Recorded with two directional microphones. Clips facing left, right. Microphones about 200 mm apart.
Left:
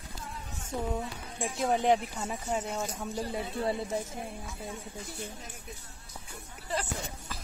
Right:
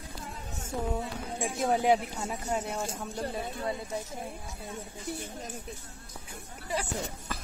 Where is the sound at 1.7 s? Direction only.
5° right (ahead or behind).